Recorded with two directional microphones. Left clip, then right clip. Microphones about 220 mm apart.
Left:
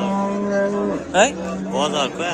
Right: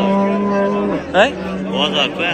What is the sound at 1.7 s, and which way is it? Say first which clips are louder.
Speech: right 4 dB; 40° left (ahead or behind).